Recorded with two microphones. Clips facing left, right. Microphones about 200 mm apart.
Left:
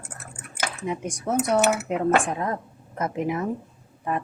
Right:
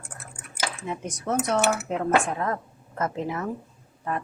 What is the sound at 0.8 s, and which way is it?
A woman's voice, 15° left (ahead or behind).